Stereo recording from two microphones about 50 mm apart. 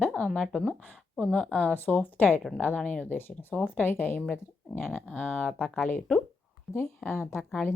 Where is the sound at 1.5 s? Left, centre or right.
Left.